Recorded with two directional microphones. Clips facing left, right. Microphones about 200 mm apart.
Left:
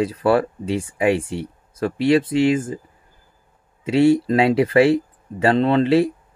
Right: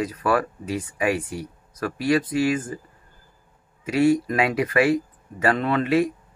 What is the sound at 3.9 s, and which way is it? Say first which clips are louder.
Speech: left 4 dB; 30° left (ahead or behind).